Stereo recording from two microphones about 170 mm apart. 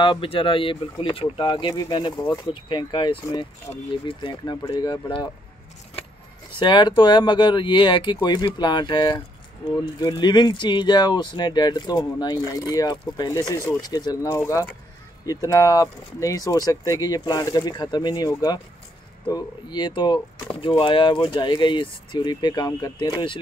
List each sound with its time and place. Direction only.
0.0 s speech: 30° left (ahead or behind)
6.5 s speech: 25° left (ahead or behind)